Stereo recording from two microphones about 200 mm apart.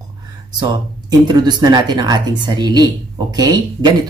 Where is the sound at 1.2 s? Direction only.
20° right (ahead or behind).